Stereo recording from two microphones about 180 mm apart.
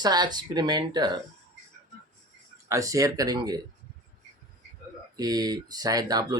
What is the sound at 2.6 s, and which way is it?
Speech, 15° right (ahead or behind).